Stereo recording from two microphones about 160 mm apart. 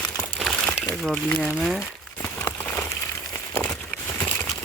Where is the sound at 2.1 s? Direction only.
10° left (ahead or behind).